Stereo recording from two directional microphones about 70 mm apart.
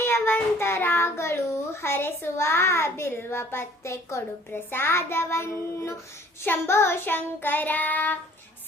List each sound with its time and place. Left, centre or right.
0.0 s a child's voice: left
4.7 s child singing: left